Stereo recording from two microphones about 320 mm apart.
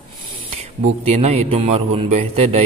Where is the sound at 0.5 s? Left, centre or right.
Centre.